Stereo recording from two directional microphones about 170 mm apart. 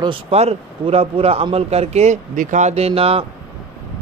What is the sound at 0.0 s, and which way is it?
A man's voice, 35° right (ahead or behind).